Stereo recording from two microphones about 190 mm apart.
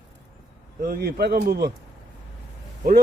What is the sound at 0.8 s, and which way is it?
Speech, 50° right (ahead or behind).